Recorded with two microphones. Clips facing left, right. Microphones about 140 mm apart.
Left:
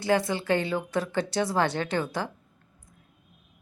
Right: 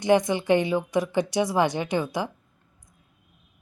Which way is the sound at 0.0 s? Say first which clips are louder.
Right 4 dB; 20° right (ahead or behind).